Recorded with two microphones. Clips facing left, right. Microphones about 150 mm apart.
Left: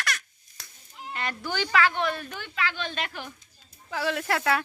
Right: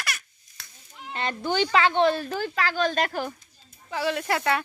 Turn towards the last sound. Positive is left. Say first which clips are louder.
# right 1 dB
turn(degrees=0)  # may be behind; listen again after turning